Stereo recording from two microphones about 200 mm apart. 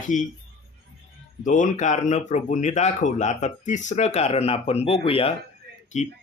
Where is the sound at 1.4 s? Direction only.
40° left (ahead or behind).